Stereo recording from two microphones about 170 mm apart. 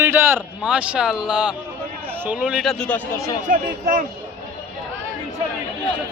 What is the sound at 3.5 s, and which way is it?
Speech, 55° right (ahead or behind).